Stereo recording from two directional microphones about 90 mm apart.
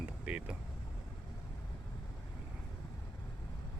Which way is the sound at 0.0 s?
10° right (ahead or behind).